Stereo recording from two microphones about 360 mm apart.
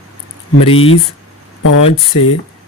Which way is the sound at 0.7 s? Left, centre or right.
Left.